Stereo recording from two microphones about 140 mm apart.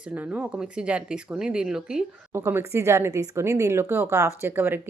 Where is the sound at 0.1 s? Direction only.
10° right (ahead or behind).